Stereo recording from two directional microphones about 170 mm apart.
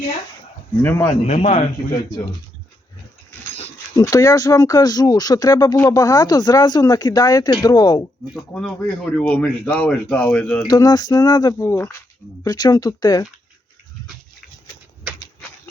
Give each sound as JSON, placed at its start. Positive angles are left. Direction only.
{"t": 0.8, "sound": "speech", "side_deg": 10}
{"t": 1.3, "sound": "speech", "side_deg": 40}
{"t": 3.9, "sound": "speech", "side_deg": 20}
{"t": 9.1, "sound": "speech", "side_deg": 10}
{"t": 10.7, "sound": "speech", "side_deg": 20}